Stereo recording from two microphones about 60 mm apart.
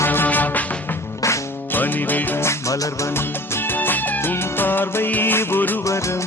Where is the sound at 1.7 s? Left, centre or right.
Left.